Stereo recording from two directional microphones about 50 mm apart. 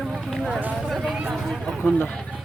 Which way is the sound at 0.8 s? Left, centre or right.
Centre.